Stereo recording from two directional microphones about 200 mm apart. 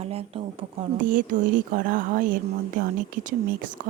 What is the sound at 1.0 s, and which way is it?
Speech, 40° right (ahead or behind).